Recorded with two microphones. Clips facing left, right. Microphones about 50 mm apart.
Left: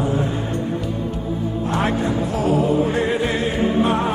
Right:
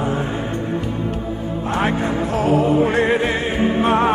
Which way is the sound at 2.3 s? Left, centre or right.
Right.